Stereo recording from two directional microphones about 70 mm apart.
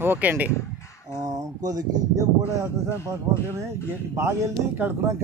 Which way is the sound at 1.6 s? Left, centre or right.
Right.